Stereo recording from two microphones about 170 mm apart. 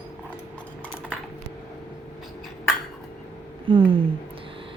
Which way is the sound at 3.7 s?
30° right (ahead or behind).